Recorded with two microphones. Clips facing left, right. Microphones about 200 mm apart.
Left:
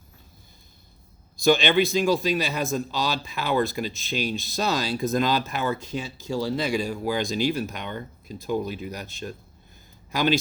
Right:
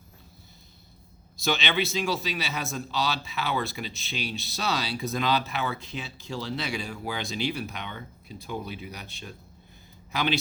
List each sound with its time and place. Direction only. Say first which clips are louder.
1.5 s a man's voice: left 8 dB; 45° left (ahead or behind)